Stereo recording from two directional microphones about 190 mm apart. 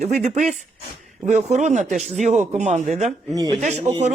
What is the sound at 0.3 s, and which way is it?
Speech, 40° right (ahead or behind).